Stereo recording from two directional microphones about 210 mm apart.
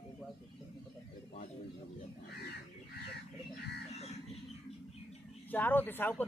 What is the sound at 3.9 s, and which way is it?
Crow, 30° left (ahead or behind).